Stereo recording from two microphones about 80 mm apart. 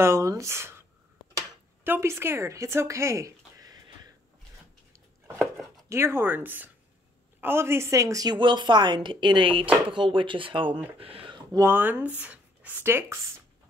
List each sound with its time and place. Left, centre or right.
0.0 s speech: right
1.9 s speech: right
5.9 s speech: right
8.4 s a woman's voice: right
11.6 s speech: right
12.8 s speech: right